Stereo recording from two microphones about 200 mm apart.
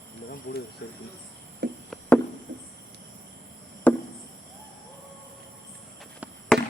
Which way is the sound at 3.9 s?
5° left (ahead or behind).